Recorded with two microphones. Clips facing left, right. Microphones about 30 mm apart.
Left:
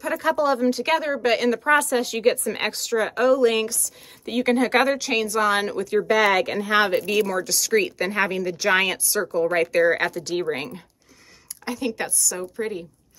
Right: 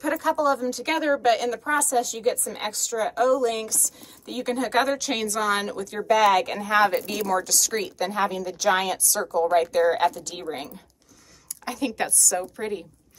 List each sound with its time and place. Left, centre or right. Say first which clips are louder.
0.2 s speech: left 4 dB; left
1.6 s speech: left 4 dB; left
5.1 s a woman's voice: left 4 dB; centre
5.4 s a woman's voice: left 3 dB; left
7.1 s speech: left 3 dB; left
11.6 s a woman's voice: even; centre